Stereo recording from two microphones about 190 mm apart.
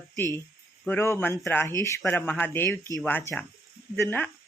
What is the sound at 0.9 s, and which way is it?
Speech, 15° left (ahead or behind).